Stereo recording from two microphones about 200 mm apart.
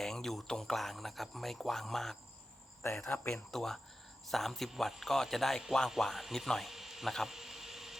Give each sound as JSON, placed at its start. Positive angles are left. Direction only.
{"t": 0.0, "sound": "speech", "side_deg": 0}